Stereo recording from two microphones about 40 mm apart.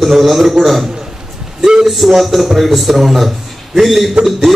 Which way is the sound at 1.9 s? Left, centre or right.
Centre.